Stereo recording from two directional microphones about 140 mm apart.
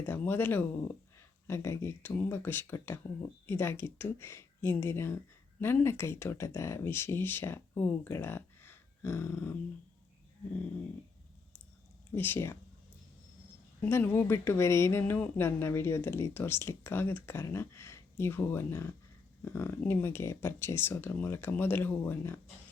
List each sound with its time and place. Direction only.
0.0 s a woman's voice: 15° left (ahead or behind)
12.1 s a woman's voice: 15° left (ahead or behind)
13.8 s a woman's voice: 15° left (ahead or behind)